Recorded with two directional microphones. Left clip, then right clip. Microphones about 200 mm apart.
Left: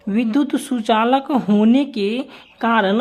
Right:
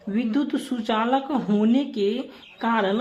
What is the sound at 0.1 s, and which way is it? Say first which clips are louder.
Speech: left 6 dB; 40° left (ahead or behind).